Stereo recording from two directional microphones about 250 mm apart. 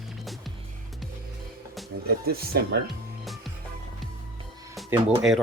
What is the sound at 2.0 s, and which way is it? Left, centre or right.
Speech, right.